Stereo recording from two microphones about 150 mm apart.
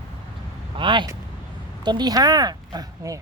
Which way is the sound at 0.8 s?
30° right (ahead or behind).